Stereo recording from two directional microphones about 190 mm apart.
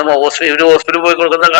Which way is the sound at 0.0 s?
Centre (ahead or behind).